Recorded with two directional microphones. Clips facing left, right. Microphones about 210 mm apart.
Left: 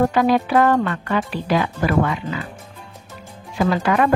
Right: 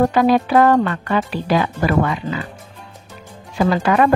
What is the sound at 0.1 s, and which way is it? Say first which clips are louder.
Speech: right 2 dB; 35° right (ahead or behind).